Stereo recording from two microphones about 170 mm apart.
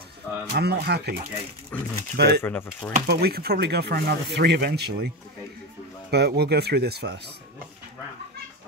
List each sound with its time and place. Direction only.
0.5 s speech: 70° right (ahead or behind)
1.7 s speech: 10° left (ahead or behind)
2.1 s speech: 75° right (ahead or behind)
2.4 s speech: 10° left (ahead or behind)
3.1 s speech: 65° right (ahead or behind)